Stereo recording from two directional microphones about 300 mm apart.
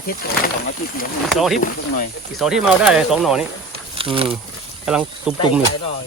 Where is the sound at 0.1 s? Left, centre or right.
Left.